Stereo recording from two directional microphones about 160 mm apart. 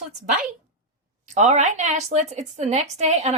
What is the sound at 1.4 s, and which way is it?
A woman's voice, 50° right (ahead or behind).